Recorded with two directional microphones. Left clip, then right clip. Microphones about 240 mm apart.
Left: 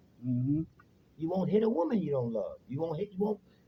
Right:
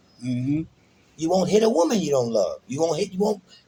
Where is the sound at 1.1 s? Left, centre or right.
Centre.